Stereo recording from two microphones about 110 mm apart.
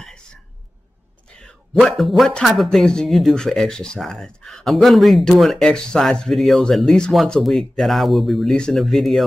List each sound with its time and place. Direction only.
1.4 s speech: 5° left (ahead or behind)